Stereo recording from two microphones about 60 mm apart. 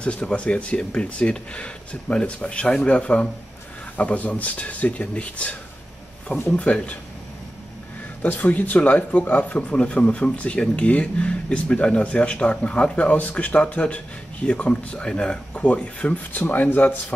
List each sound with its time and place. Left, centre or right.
0.0 s speech: centre
8.2 s speech: left